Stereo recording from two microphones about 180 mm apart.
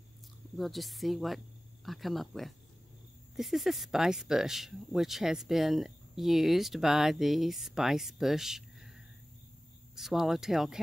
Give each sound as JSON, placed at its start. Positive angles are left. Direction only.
{"t": 0.6, "sound": "speech", "side_deg": 0}